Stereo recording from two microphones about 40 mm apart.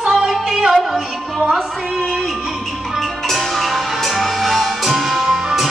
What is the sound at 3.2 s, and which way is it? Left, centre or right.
Music, centre.